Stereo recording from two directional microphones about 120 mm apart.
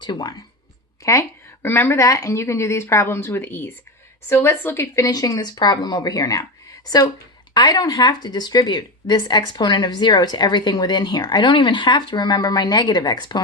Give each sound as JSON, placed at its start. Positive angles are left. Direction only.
{"t": 0.0, "sound": "speech", "side_deg": 35}